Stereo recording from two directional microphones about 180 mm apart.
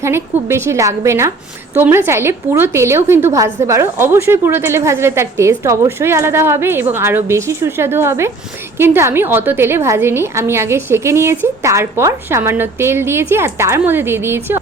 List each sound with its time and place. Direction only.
0.0 s a woman's voice: 15° right (ahead or behind)